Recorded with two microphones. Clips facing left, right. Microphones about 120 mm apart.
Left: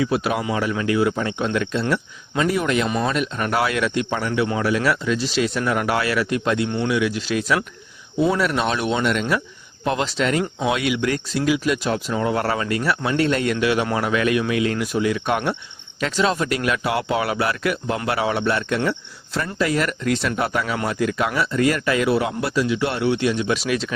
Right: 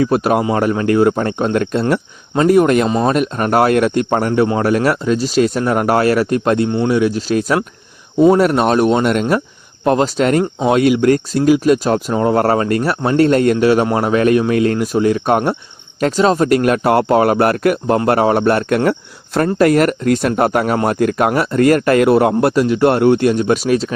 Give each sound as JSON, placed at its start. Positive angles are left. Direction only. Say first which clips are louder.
{"t": 0.0, "sound": "speech", "louder": "right 7 dB", "side_deg": -45}